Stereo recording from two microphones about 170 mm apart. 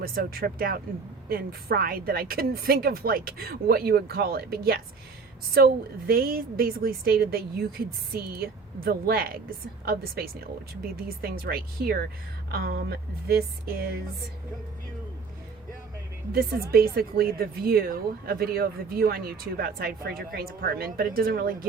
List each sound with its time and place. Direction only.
0.0 s speech: 60° right (ahead or behind)
16.3 s speech: 60° right (ahead or behind)